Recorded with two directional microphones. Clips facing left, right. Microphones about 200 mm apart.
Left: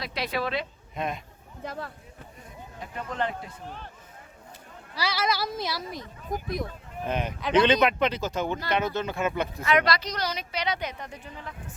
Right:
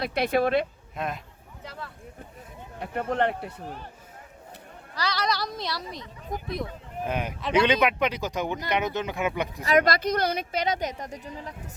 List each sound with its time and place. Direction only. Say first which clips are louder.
0.0 s a woman's voice: right 6 dB; 55° right (ahead or behind)
0.9 s speech: left 1 dB; 5° right (ahead or behind)
1.6 s speech: left 5 dB; 50° left (ahead or behind)
2.7 s speech: right 6 dB; 60° right (ahead or behind)
4.9 s speech: even; 10° left (ahead or behind)
6.6 s speech: right 1 dB; 10° right (ahead or behind)
9.6 s a woman's voice: right 3 dB; 45° right (ahead or behind)